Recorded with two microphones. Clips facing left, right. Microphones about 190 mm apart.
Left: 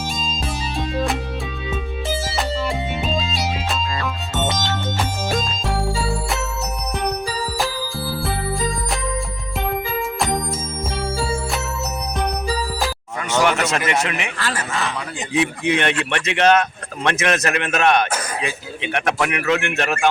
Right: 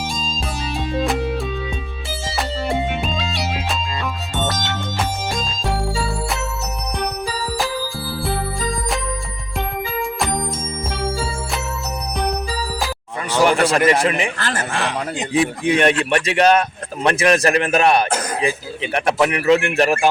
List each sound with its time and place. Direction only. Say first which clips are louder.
2.3 s music: right 4 dB; centre (ahead or behind)
4.4 s music: left 1 dB; 25° left (ahead or behind)
5.9 s music: even; centre (ahead or behind)
10.2 s music: even; centre (ahead or behind)
13.4 s speech: right 6 dB; 35° right (ahead or behind)
14.8 s speech: right 4 dB; 60° right (ahead or behind)
15.3 s a man's voice: right 1 dB; 35° right (ahead or behind)